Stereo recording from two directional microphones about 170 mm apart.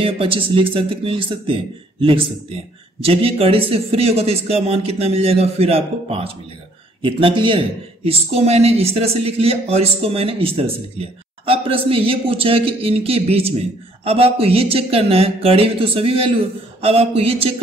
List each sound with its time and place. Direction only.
0.0 s speech: 30° right (ahead or behind)